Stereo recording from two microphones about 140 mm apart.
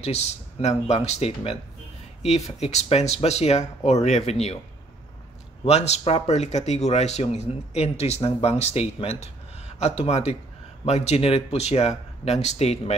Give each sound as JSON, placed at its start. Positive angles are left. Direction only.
{"t": 0.0, "sound": "speech", "side_deg": 50}
{"t": 5.7, "sound": "speech", "side_deg": 50}